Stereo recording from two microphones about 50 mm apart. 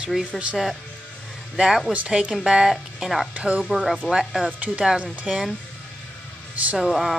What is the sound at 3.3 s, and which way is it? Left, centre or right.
Speech, right.